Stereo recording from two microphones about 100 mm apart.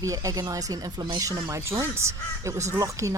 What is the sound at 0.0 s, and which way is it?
Speech, 35° right (ahead or behind).